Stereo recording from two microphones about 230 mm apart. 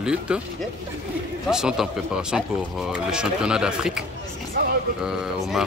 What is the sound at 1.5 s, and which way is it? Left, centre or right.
Speech, centre.